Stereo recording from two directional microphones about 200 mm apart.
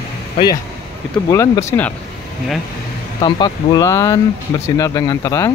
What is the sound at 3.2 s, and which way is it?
Speech, 20° left (ahead or behind).